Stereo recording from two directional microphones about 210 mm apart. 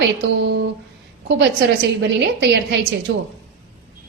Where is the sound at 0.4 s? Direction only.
55° right (ahead or behind).